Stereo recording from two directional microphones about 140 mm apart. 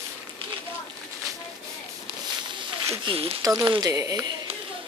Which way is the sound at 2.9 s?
40° right (ahead or behind).